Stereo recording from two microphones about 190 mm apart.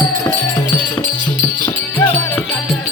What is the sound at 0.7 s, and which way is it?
Music, 10° left (ahead or behind).